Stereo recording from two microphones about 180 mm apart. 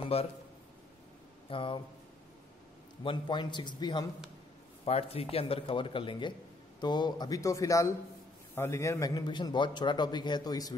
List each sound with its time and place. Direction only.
0.0 s a man's voice: 35° left (ahead or behind)
1.5 s a man's voice: 30° left (ahead or behind)
3.0 s a man's voice: 25° left (ahead or behind)